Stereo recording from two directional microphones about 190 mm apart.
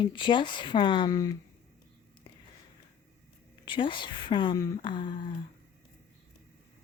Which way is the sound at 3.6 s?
25° left (ahead or behind).